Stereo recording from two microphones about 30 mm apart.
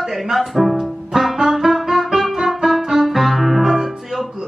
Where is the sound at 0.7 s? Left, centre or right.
Centre.